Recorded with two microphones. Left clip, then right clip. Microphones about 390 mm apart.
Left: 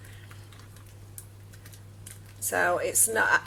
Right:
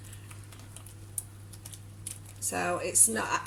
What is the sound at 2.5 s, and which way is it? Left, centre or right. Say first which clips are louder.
Speech: left 5 dB; centre.